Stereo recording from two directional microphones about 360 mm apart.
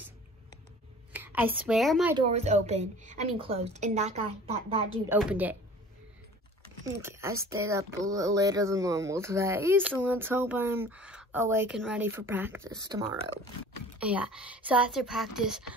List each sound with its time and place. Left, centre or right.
1.1 s a woman's voice: centre
2.1 s speech: centre
5.0 s speech: centre
7.0 s speech: centre